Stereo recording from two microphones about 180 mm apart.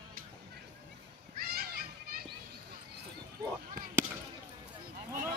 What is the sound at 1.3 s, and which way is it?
Children playing, 55° right (ahead or behind).